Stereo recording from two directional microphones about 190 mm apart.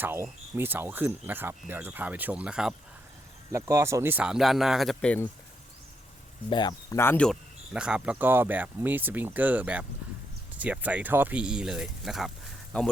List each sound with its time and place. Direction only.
0.0 s speech: 10° right (ahead or behind)
3.5 s speech: 15° right (ahead or behind); by 5.3 s 10° left (ahead or behind)
6.5 s speech: 20° left (ahead or behind); by 12.9 s 5° left (ahead or behind)